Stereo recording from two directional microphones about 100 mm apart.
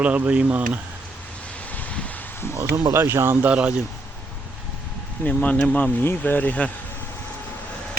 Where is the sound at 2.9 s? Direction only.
25° right (ahead or behind).